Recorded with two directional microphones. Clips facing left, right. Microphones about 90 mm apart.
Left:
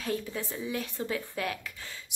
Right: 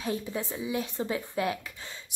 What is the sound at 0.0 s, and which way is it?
A woman's voice, 20° right (ahead or behind).